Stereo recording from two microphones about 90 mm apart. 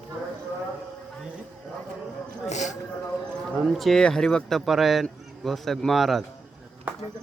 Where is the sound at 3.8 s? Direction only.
5° left (ahead or behind).